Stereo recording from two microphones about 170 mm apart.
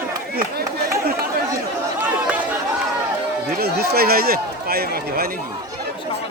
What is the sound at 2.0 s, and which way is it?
Chatter, 10° right (ahead or behind).